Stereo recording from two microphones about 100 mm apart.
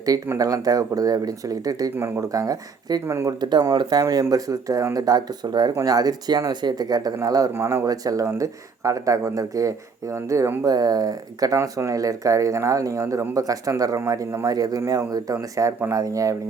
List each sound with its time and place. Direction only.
0.3 s speech: 35° right (ahead or behind)
3.4 s speech: 45° right (ahead or behind)
7.5 s speech: 25° right (ahead or behind)
10.6 s speech: 40° right (ahead or behind)